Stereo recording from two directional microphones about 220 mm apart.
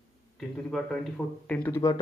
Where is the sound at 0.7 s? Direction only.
5° left (ahead or behind).